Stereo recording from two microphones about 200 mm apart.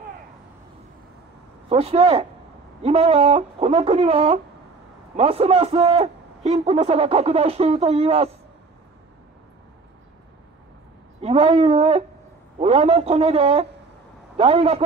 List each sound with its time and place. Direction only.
1.7 s a man's voice: 30° right (ahead or behind)
11.1 s a man's voice: 30° right (ahead or behind)